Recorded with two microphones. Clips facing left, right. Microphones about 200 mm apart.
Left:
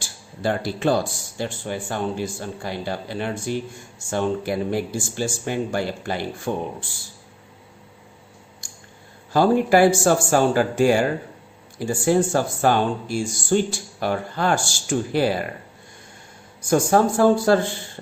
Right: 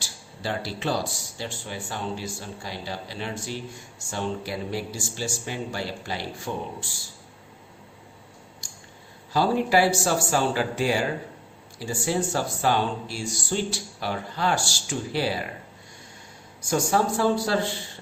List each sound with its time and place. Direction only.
0.0 s speech: 50° left (ahead or behind)
8.6 s a sound: 50° left (ahead or behind)
9.3 s speech: 50° left (ahead or behind)
16.6 s speech: 50° left (ahead or behind)